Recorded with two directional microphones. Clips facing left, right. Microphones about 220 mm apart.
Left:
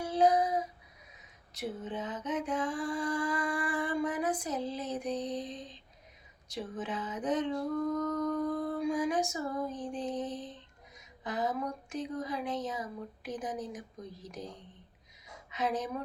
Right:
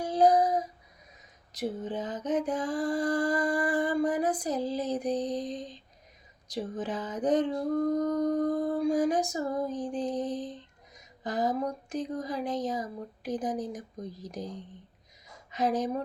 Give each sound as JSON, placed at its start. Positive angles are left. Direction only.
{"t": 0.0, "sound": "female singing", "side_deg": -35}
{"t": 1.5, "sound": "mantra", "side_deg": -35}
{"t": 15.4, "sound": "speech", "side_deg": -35}